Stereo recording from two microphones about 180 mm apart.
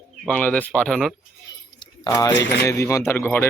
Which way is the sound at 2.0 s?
20° left (ahead or behind).